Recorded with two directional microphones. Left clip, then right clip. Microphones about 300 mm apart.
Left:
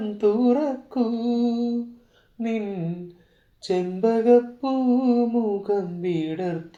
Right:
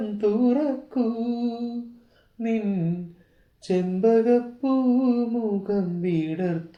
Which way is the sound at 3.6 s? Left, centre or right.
Left.